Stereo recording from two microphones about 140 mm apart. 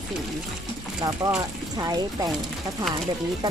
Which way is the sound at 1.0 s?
25° right (ahead or behind).